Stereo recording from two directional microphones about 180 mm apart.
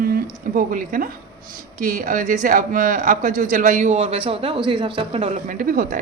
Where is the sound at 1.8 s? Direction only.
45° right (ahead or behind).